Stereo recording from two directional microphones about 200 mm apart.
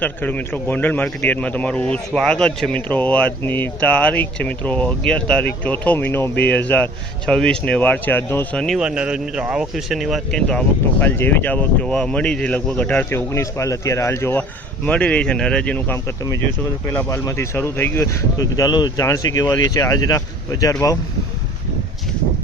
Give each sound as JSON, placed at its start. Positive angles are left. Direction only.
{"t": 0.0, "sound": "a man's voice", "side_deg": 10}